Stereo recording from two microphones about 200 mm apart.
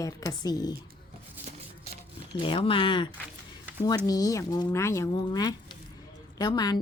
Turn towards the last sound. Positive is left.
turn(degrees=20)  # may be behind; listen again after turning